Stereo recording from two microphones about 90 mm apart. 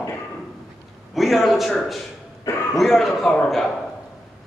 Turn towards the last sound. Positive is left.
turn(degrees=5)  # may be behind; listen again after turning